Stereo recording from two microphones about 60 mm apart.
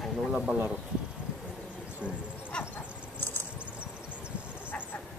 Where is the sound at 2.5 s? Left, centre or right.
Centre.